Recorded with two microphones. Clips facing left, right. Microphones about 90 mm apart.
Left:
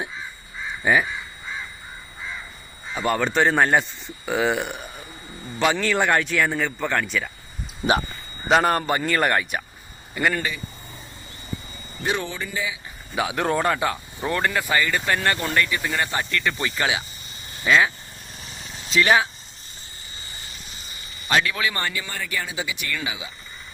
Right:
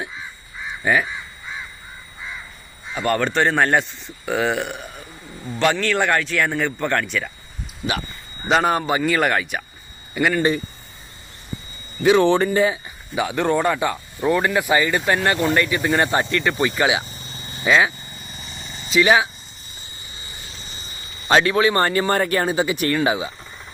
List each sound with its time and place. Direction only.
3.1 s a man's voice: 5° left (ahead or behind)
5.5 s a man's voice: 10° left (ahead or behind)
8.4 s a man's voice: centre (ahead or behind)
12.0 s speech: 90° right
12.5 s speech: 55° right (ahead or behind)
13.1 s a man's voice: centre (ahead or behind)
14.3 s speech: 10° right (ahead or behind)
17.0 s vehicle: 30° right (ahead or behind)
18.3 s vehicle: centre (ahead or behind); by 20.6 s 20° right (ahead or behind)
21.2 s a man's voice: 30° right (ahead or behind)